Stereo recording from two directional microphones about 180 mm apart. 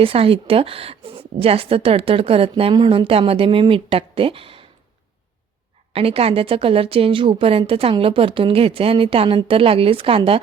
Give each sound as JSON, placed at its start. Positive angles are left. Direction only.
{"t": 0.0, "sound": "a woman's voice", "side_deg": -30}
{"t": 5.9, "sound": "a woman's voice", "side_deg": -30}